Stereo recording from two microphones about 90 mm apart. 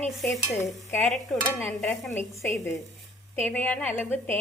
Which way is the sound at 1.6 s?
25° left (ahead or behind).